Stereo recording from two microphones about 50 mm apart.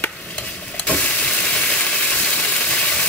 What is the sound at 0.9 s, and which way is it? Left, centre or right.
Steam, centre.